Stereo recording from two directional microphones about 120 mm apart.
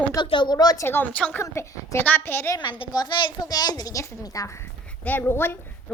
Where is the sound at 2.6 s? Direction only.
40° left (ahead or behind).